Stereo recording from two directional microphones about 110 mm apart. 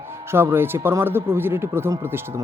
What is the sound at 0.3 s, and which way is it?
Speech, 20° right (ahead or behind).